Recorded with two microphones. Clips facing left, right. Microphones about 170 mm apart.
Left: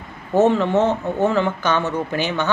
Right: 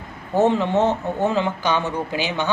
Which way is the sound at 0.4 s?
15° right (ahead or behind).